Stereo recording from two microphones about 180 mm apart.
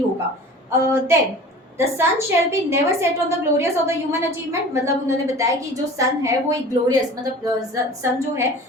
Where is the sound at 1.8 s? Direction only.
15° right (ahead or behind).